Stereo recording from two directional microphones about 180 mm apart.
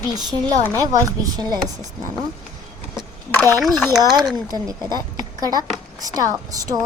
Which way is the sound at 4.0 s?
20° right (ahead or behind).